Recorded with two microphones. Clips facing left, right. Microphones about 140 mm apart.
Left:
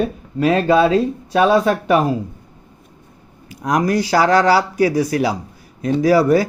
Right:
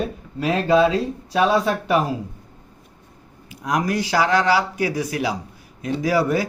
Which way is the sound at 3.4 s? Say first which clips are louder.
Left 5 dB; 40° left (ahead or behind).